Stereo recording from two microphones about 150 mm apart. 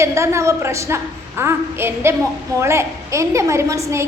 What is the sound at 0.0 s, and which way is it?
A woman's voice, 20° right (ahead or behind).